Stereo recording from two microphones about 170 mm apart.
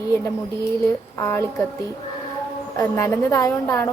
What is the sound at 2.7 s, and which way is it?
A woman's voice, 15° left (ahead or behind).